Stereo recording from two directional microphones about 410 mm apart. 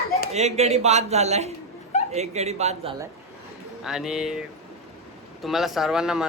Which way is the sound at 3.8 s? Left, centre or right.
Centre.